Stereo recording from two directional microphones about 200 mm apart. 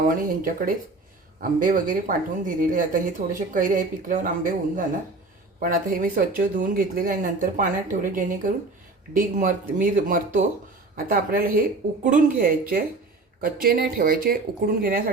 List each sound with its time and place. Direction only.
0.2 s a woman's voice: 45° right (ahead or behind)
5.5 s a woman's voice: 45° right (ahead or behind)